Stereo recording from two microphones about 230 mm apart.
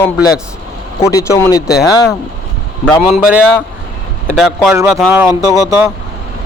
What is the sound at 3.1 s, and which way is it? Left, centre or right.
Speech, centre.